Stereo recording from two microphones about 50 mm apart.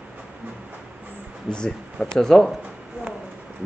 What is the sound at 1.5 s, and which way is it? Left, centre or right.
Speech, centre.